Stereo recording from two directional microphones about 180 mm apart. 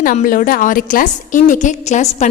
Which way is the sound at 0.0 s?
50° left (ahead or behind).